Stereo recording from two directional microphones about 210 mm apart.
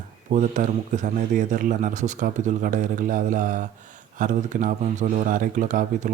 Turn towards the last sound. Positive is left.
turn(degrees=-35)  # may be behind; listen again after turning